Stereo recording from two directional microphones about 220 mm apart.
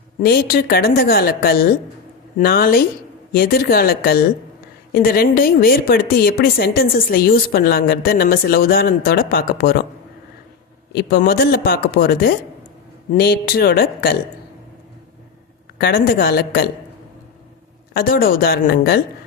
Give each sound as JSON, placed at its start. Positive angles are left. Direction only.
{"t": 0.2, "sound": "a woman's voice", "side_deg": 45}
{"t": 10.9, "sound": "a woman's voice", "side_deg": 45}
{"t": 15.8, "sound": "a woman's voice", "side_deg": 45}
{"t": 17.9, "sound": "a woman's voice", "side_deg": 40}